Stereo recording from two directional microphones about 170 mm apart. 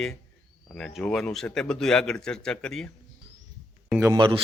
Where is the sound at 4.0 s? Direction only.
15° right (ahead or behind).